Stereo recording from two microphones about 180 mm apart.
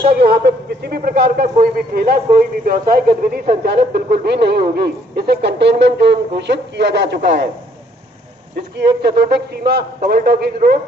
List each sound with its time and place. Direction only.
0.1 s a man's voice: 60° right (ahead or behind)
8.5 s a man's voice: 65° right (ahead or behind)